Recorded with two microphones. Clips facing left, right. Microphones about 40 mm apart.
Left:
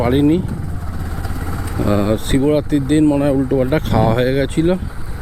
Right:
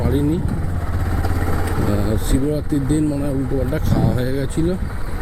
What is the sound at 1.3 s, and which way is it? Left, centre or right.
Vehicle, right.